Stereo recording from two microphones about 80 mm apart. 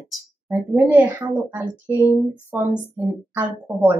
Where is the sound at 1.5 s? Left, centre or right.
Right.